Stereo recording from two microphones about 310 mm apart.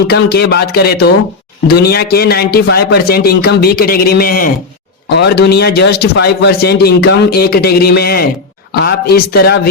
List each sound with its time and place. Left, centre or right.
0.1 s a man's voice: left